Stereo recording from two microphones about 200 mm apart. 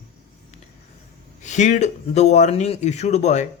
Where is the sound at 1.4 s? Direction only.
35° left (ahead or behind).